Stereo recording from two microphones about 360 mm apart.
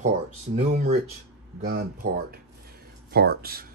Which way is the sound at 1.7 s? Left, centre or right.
Right.